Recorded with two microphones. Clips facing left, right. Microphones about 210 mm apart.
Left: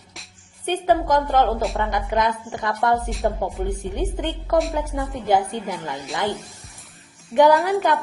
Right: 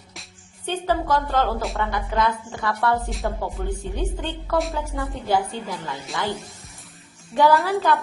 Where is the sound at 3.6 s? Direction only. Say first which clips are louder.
Left 2 dB; 20° left (ahead or behind).